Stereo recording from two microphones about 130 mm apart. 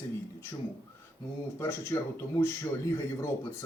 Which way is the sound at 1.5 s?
20° left (ahead or behind).